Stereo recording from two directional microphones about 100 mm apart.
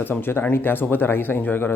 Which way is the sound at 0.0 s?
20° left (ahead or behind).